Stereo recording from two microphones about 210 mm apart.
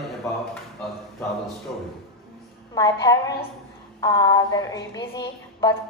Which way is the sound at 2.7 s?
15° left (ahead or behind).